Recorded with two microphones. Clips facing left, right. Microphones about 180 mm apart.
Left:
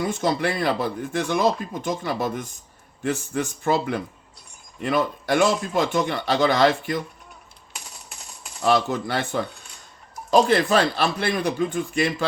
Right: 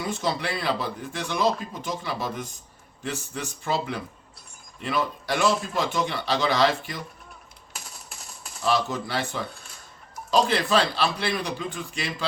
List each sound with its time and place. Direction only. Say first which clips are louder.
0.0 s speech: left 5 dB; 50° left (ahead or behind)
8.6 s speech: left 4 dB; 55° left (ahead or behind)